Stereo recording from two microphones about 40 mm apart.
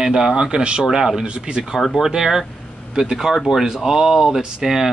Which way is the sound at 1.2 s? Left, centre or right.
Right.